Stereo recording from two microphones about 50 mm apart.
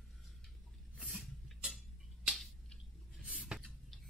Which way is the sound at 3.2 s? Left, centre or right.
Centre.